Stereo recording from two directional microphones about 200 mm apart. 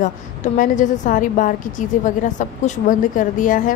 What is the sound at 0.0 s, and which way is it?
A woman's voice, 40° left (ahead or behind).